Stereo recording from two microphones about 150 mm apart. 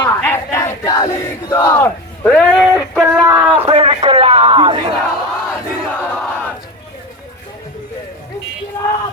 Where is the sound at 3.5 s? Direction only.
40° right (ahead or behind).